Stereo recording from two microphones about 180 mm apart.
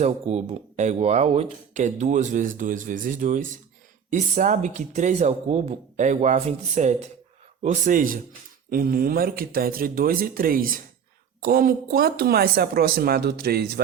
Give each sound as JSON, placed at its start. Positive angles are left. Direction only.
{"t": 0.0, "sound": "speech", "side_deg": -35}